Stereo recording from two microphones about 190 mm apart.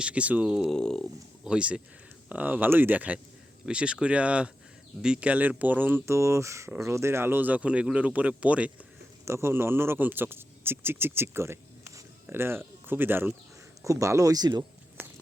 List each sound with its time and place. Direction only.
0.0 s speech: 5° right (ahead or behind)